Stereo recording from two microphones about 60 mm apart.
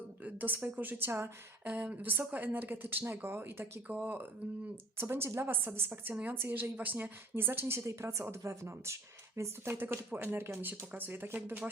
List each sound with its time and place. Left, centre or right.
0.2 s speech: right
3.8 s speech: right
4.9 s speech: right
7.8 s speech: right
9.6 s speech: right
10.6 s speech: right